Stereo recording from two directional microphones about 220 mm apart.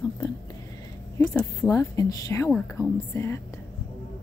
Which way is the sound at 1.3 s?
15° left (ahead or behind).